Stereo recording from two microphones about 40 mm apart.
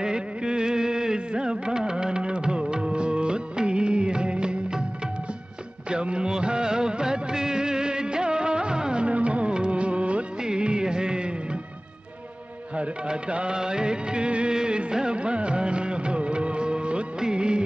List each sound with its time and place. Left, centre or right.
0.0 s music: right
5.9 s music of bollywood: right
10.4 s music: right
12.7 s music: right
13.6 s music of bollywood: right